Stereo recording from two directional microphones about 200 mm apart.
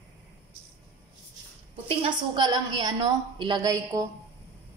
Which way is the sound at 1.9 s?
25° right (ahead or behind).